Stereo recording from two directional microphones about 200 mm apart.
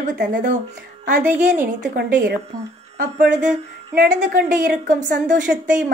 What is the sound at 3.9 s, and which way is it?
A woman's voice, 45° right (ahead or behind).